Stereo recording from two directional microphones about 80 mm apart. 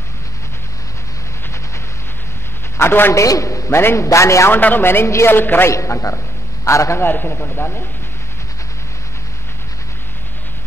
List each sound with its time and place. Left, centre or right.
2.8 s speech: left
3.2 s a man's voice: left
4.5 s a man's voice: left
7.0 s speech: left